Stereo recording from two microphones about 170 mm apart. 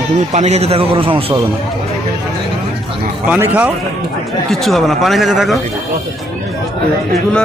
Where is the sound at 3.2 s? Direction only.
10° right (ahead or behind).